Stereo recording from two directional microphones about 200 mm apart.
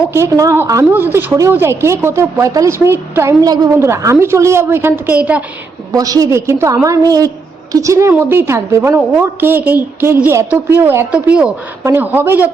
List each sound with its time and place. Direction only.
0.1 s a woman's voice: 15° right (ahead or behind)
5.9 s a woman's voice: 20° right (ahead or behind)